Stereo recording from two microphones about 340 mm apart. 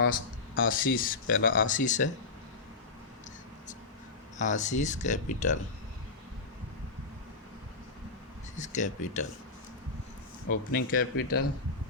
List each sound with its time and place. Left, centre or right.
0.5 s speech: left
4.4 s speech: left
8.5 s speech: left
10.5 s speech: left